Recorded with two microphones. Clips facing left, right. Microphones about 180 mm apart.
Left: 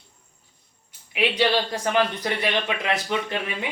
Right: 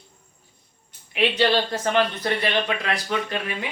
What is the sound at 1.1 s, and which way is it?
Speech, 10° left (ahead or behind).